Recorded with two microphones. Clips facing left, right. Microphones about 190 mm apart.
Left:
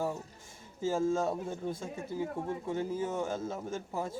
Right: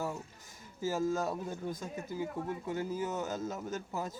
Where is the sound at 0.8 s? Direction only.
25° left (ahead or behind).